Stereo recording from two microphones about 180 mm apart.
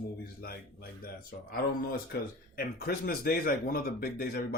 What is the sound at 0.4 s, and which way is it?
Speech, 55° left (ahead or behind).